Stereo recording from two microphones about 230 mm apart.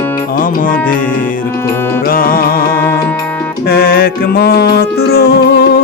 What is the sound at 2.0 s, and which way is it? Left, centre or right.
Music, left.